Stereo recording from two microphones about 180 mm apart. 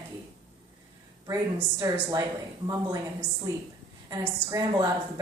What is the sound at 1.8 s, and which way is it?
A woman's voice, 20° right (ahead or behind).